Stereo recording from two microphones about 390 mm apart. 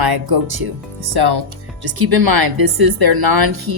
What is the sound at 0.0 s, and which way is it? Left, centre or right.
Speech, right.